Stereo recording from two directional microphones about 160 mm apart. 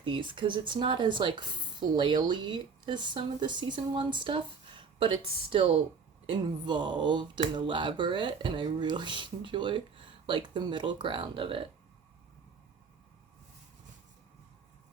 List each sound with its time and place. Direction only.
0.0 s speech: 30° right (ahead or behind)